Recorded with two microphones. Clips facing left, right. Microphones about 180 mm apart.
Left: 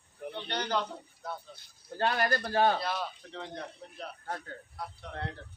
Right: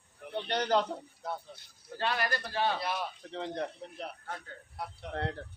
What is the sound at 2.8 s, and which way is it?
Speech, 20° right (ahead or behind).